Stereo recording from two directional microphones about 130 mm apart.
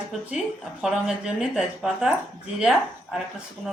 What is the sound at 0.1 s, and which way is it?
Speech, 5° right (ahead or behind).